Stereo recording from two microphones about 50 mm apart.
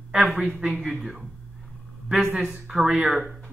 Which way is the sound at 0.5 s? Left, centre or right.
Centre.